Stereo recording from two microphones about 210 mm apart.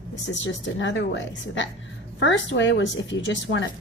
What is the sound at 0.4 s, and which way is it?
A woman's voice, 60° left (ahead or behind).